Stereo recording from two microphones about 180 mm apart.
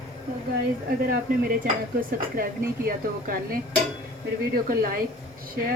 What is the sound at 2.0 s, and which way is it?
Speech, 55° right (ahead or behind).